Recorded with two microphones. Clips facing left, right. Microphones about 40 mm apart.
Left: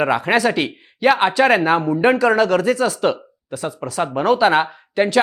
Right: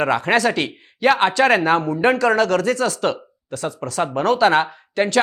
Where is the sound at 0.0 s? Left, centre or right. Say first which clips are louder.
Left 1 dB; centre.